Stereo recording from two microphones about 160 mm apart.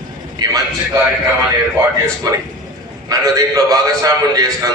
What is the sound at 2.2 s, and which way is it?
A man's voice, 25° right (ahead or behind).